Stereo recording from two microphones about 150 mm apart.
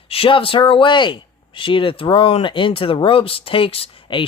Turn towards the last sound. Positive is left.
turn(degrees=35)  # may be behind; listen again after turning